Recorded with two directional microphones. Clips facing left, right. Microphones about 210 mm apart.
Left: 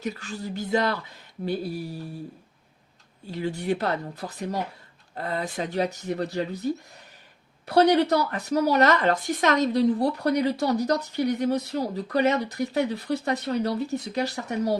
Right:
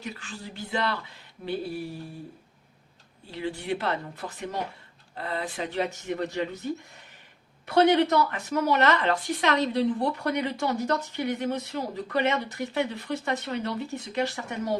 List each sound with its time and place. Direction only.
0.0 s speech: 40° left (ahead or behind)
3.3 s speech: 40° left (ahead or behind)
7.7 s speech: 35° left (ahead or behind)